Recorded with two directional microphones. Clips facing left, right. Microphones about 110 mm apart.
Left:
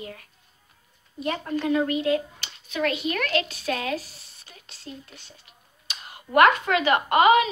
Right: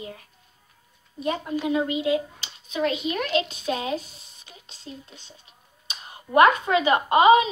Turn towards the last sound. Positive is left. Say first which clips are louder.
# right 2 dB
turn(degrees=-20)  # may be behind; listen again after turning